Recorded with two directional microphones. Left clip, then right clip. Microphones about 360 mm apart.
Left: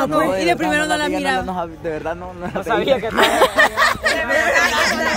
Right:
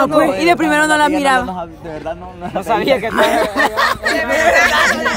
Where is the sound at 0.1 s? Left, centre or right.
Centre.